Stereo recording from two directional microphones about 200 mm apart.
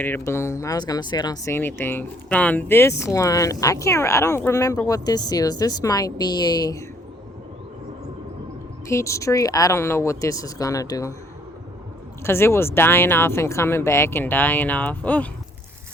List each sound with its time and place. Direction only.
0.0 s speech: 10° left (ahead or behind)
8.9 s speech: 15° left (ahead or behind)
12.2 s speech: 10° left (ahead or behind)